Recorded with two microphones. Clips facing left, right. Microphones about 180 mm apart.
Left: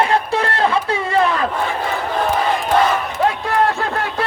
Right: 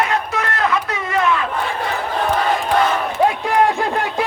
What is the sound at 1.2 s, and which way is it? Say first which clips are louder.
Battle cry: left 1 dB; 35° left (ahead or behind).